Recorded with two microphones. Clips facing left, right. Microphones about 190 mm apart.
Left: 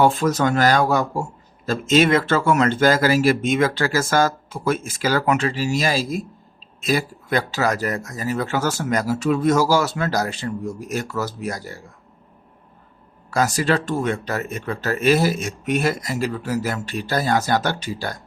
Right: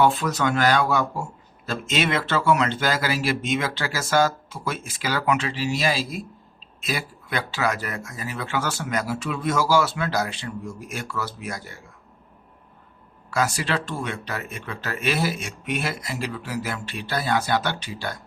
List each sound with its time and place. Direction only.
0.0 s speech: 45° left (ahead or behind)
13.3 s speech: 40° left (ahead or behind)